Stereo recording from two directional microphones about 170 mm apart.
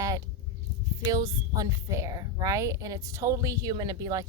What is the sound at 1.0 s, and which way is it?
A woman's voice, 20° right (ahead or behind).